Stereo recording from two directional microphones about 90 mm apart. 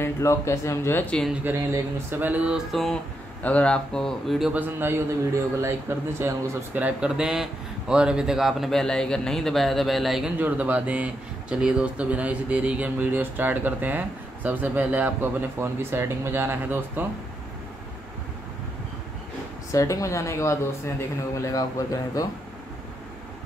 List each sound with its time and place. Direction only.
0.0 s speech: 35° left (ahead or behind)
1.4 s a man's voice: 25° right (ahead or behind)
2.7 s a man's voice: 5° left (ahead or behind)
3.4 s speech: 15° left (ahead or behind)
4.5 s a man's voice: 20° right (ahead or behind)
6.7 s a man's voice: 15° right (ahead or behind)
10.4 s a man's voice: 15° right (ahead or behind)
19.7 s speech: 35° left (ahead or behind)